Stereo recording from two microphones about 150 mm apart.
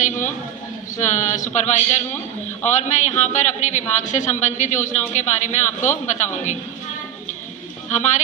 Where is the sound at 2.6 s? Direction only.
50° left (ahead or behind).